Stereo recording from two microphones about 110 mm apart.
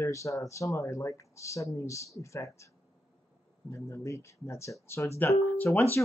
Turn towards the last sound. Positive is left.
turn(degrees=20)  # may be behind; listen again after turning